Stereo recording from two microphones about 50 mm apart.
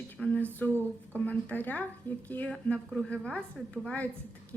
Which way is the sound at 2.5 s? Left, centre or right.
Left.